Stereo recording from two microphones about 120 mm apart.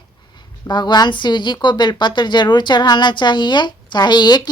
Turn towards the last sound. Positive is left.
turn(degrees=35)  # may be behind; listen again after turning